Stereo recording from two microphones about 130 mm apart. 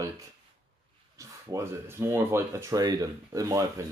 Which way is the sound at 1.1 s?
20° right (ahead or behind).